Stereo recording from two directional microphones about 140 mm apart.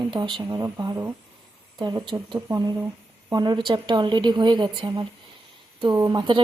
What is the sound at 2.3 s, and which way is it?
Speech, 20° right (ahead or behind).